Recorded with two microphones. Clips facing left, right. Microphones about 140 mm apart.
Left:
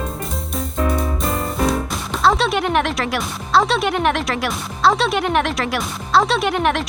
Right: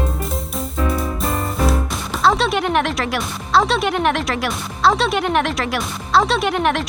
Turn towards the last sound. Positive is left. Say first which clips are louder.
# even
turn(degrees=0)  # may be behind; listen again after turning